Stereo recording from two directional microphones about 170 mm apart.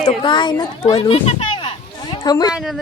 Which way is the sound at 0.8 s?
35° left (ahead or behind).